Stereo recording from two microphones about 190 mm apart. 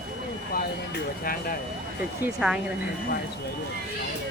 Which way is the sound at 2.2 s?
5° right (ahead or behind).